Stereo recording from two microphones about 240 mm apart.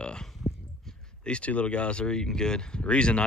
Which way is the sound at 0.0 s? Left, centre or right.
Centre.